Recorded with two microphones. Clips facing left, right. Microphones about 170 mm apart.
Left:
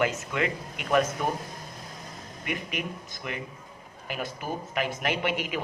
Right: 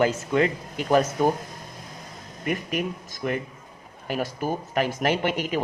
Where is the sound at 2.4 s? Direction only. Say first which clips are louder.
Right 6 dB; 40° right (ahead or behind).